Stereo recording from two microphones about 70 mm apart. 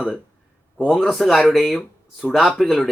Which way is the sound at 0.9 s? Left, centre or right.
Centre.